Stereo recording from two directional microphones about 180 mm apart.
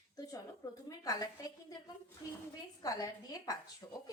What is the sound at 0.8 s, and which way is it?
Speech, 20° left (ahead or behind).